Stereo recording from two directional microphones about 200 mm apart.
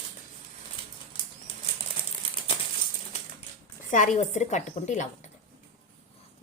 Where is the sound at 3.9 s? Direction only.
40° left (ahead or behind).